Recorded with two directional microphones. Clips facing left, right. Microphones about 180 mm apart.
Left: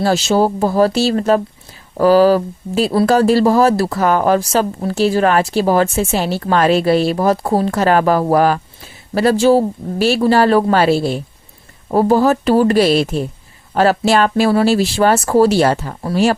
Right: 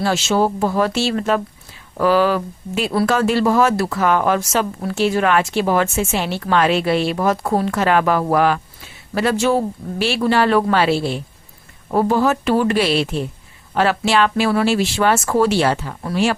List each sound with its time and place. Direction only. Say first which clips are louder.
0.0 s a woman's voice: left 3 dB; 35° left (ahead or behind)